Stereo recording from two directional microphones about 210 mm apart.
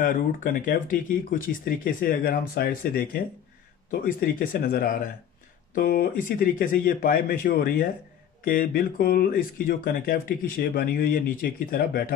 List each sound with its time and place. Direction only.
0.0 s speech: 40° left (ahead or behind)